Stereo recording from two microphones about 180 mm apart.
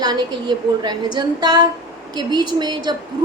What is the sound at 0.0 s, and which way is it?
A woman's voice, 25° right (ahead or behind).